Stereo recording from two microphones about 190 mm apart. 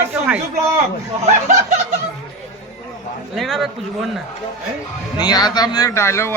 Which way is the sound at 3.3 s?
Centre (ahead or behind).